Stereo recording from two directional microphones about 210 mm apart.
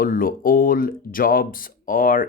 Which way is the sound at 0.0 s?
40° left (ahead or behind).